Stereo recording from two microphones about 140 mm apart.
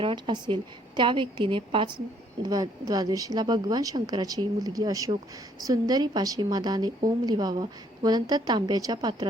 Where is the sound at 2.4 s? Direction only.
25° right (ahead or behind).